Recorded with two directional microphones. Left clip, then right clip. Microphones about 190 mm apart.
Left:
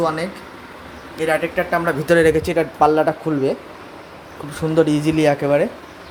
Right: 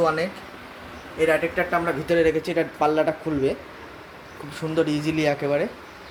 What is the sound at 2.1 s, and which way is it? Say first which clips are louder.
Speech: left 6 dB; 30° left (ahead or behind).